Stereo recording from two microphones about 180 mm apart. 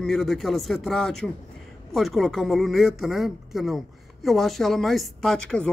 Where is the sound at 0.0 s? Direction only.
Centre (ahead or behind).